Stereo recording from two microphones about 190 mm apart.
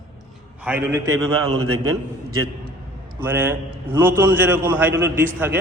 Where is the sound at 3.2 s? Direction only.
10° right (ahead or behind).